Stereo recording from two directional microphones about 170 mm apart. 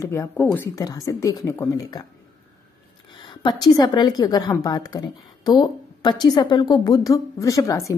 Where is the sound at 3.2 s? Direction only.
25° left (ahead or behind).